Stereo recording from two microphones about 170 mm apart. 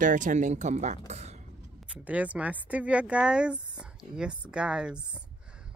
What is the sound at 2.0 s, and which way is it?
Speech, 10° right (ahead or behind).